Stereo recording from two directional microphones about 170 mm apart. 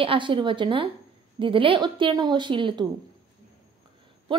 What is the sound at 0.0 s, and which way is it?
A woman's voice, 30° right (ahead or behind).